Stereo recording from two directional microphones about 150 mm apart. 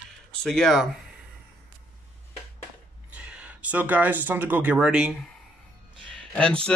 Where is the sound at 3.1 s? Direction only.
10° right (ahead or behind).